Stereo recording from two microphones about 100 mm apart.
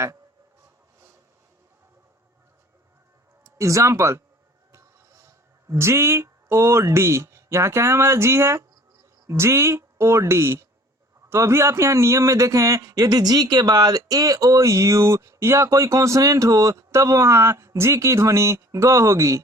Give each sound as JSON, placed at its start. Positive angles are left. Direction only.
{"t": 3.4, "sound": "a man's voice", "side_deg": -30}